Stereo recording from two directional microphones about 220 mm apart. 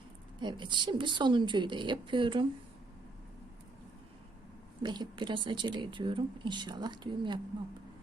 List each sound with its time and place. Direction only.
0.3 s speech: 20° right (ahead or behind)
4.8 s speech: 20° right (ahead or behind)